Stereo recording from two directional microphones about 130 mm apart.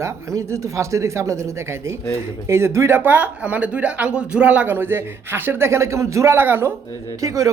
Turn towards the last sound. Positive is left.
turn(degrees=-25)  # may be behind; listen again after turning